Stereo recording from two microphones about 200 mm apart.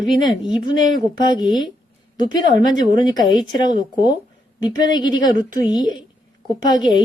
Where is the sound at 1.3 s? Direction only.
40° right (ahead or behind).